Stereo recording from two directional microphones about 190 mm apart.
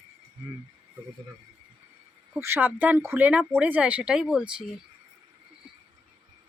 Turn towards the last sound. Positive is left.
turn(degrees=-5)  # may be behind; listen again after turning